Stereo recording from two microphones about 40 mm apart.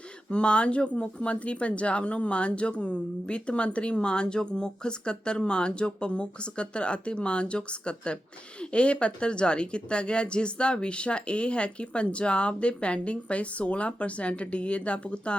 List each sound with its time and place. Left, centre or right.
0.3 s speech: left